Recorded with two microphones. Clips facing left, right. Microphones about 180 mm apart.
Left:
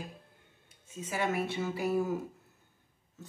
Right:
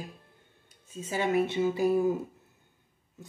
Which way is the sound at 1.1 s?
25° right (ahead or behind).